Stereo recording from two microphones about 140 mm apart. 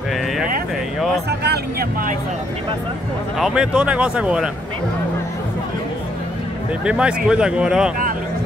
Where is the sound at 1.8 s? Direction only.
90° right.